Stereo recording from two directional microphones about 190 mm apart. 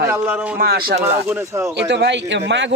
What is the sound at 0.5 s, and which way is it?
Speech, 55° right (ahead or behind).